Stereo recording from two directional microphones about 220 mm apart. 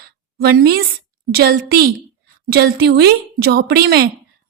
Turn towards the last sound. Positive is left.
turn(degrees=-45)  # may be behind; listen again after turning